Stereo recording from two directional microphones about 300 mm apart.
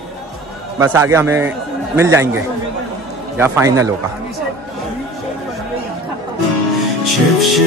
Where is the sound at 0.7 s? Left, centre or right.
Centre.